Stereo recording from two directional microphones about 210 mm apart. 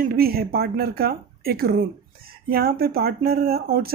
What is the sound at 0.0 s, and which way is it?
Speech, 45° right (ahead or behind).